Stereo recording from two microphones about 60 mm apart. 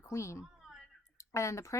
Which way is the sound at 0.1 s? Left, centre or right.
Left.